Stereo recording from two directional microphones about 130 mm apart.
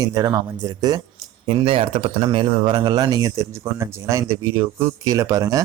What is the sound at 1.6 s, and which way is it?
Speech, 45° right (ahead or behind).